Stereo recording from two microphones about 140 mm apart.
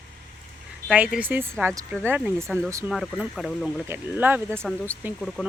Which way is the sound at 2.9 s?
Centre (ahead or behind).